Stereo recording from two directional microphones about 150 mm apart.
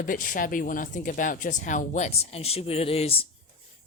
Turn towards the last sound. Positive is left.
turn(degrees=40)  # may be behind; listen again after turning